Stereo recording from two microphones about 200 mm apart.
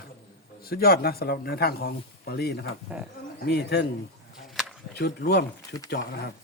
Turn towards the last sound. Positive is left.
turn(degrees=55)  # may be behind; listen again after turning